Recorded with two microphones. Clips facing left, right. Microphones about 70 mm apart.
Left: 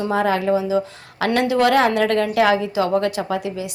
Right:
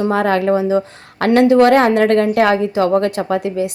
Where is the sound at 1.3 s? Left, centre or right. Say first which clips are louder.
Right 7 dB; right.